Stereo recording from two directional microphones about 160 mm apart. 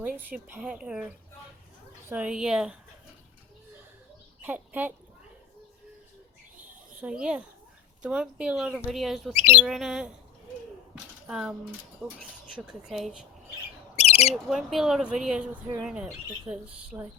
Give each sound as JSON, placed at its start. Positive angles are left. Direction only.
{"t": 0.0, "sound": "speech", "side_deg": -10}
{"t": 4.4, "sound": "speech", "side_deg": -10}
{"t": 6.6, "sound": "a sound", "side_deg": -5}
{"t": 8.0, "sound": "speech", "side_deg": -5}
{"t": 11.3, "sound": "speech", "side_deg": -5}
{"t": 12.0, "sound": "speech", "side_deg": -15}
{"t": 12.5, "sound": "speech", "side_deg": -5}
{"t": 13.9, "sound": "bird", "side_deg": 40}
{"t": 14.3, "sound": "speech", "side_deg": 0}